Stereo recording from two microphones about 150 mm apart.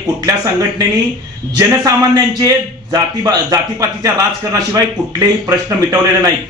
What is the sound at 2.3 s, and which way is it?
A man's voice, 25° right (ahead or behind).